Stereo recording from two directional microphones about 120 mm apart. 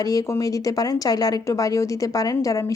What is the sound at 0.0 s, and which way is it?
A woman's voice, 30° left (ahead or behind).